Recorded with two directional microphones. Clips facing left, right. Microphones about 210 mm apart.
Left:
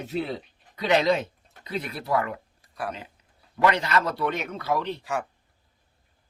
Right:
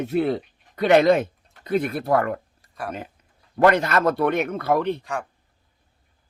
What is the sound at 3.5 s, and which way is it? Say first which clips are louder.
Speech: right 5 dB; 50° right (ahead or behind).